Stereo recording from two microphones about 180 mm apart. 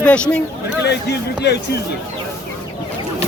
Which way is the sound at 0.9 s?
70° left (ahead or behind).